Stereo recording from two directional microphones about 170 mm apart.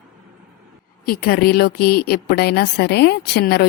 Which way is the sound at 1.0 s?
65° left (ahead or behind).